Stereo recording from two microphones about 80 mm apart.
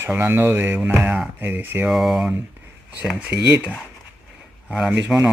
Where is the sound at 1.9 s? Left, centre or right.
Centre.